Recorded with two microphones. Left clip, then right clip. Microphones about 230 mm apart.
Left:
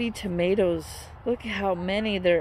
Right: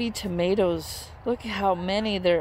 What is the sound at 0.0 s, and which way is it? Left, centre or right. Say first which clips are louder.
Speech: even; centre.